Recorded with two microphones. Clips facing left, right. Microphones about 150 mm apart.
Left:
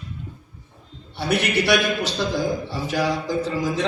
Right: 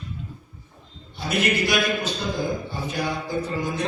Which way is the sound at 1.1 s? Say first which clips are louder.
Left 2 dB; 70° left (ahead or behind).